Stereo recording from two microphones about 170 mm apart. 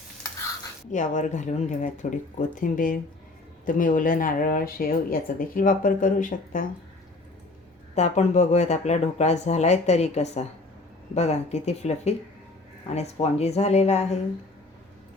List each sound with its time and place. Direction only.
0.9 s speech: 45° left (ahead or behind)
7.9 s speech: 40° left (ahead or behind)